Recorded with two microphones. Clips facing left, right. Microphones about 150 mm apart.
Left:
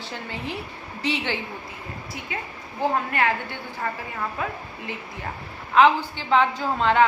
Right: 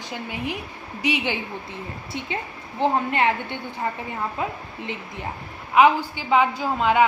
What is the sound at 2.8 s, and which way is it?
A woman's voice, 20° right (ahead or behind).